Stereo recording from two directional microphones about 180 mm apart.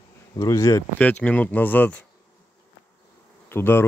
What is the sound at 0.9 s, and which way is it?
Speech, 10° left (ahead or behind).